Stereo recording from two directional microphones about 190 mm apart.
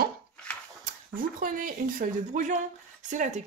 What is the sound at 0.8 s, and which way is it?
A woman's voice, 45° right (ahead or behind).